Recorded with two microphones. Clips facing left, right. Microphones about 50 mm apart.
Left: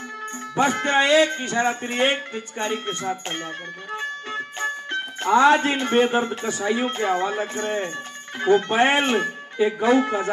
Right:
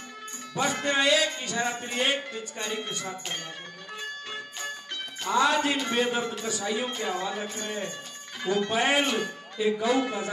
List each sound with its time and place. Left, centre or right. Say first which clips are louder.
0.6 s music: left 6 dB; left
3.9 s speech: left 8 dB; left
8.4 s music: left 8 dB; left